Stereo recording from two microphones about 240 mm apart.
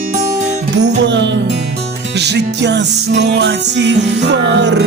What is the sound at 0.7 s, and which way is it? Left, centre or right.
Music, right.